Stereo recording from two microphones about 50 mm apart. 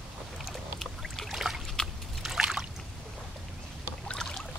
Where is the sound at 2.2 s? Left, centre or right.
Centre.